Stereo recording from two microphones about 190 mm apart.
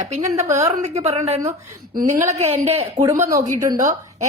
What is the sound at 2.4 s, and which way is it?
Speech, 30° right (ahead or behind).